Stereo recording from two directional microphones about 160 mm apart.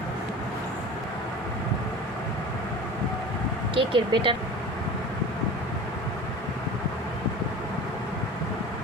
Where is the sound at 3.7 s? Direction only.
35° right (ahead or behind).